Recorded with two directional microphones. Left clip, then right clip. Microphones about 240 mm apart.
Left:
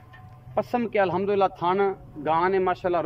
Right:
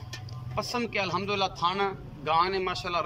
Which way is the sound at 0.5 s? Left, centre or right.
Left.